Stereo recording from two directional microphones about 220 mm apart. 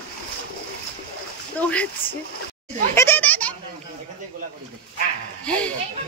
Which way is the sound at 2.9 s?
10° left (ahead or behind).